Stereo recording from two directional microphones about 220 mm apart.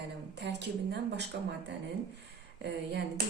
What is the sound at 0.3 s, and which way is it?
A woman's voice, 50° right (ahead or behind).